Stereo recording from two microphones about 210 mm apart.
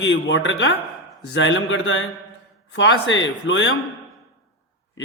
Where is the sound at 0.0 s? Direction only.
60° left (ahead or behind).